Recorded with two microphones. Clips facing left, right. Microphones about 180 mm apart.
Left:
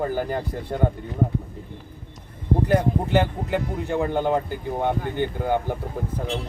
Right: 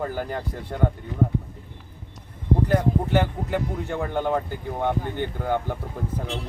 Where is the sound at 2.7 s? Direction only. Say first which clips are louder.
Left 1 dB; 15° left (ahead or behind).